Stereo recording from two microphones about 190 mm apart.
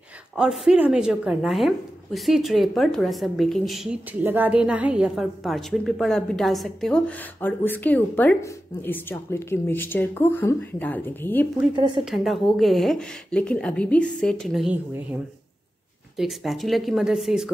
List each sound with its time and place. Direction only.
0.4 s a woman's voice: 5° right (ahead or behind)
11.7 s speech: 25° right (ahead or behind)
12.0 s a woman's voice: centre (ahead or behind)
16.2 s a woman's voice: centre (ahead or behind)